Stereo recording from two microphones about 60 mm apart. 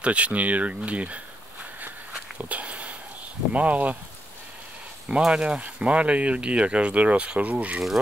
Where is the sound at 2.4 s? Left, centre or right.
Right.